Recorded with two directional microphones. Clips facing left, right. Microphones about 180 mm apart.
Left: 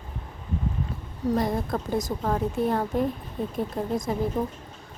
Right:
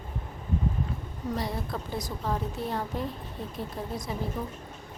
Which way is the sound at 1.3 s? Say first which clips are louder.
Left 7 dB; 50° left (ahead or behind).